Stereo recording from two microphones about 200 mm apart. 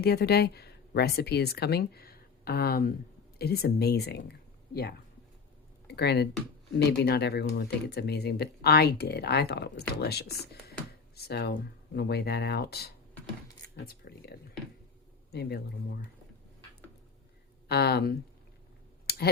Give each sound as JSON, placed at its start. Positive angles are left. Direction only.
{"t": 0.0, "sound": "speech", "side_deg": 50}
{"t": 13.7, "sound": "a sound", "side_deg": 55}
{"t": 15.3, "sound": "speech", "side_deg": 55}
{"t": 17.7, "sound": "speech", "side_deg": 55}
{"t": 19.1, "sound": "clicking", "side_deg": 50}